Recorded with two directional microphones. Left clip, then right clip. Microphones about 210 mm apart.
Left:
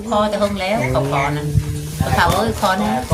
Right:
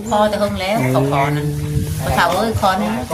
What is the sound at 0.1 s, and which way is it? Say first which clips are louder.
Speech: right 2 dB; 5° right (ahead or behind).